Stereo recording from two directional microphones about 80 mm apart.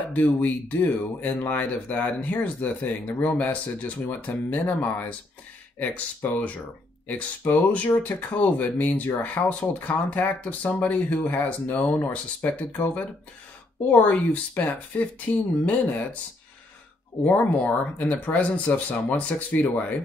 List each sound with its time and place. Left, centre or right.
0.0 s speech: left
17.2 s speech: left